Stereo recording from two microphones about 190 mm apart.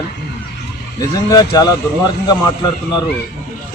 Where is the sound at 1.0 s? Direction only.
20° left (ahead or behind).